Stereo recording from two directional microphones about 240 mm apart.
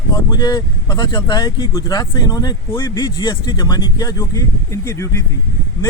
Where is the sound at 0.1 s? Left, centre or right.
Centre.